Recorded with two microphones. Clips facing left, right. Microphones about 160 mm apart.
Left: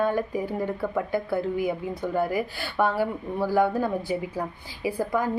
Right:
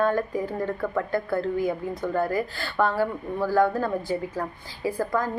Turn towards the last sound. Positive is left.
turn(degrees=15)  # may be behind; listen again after turning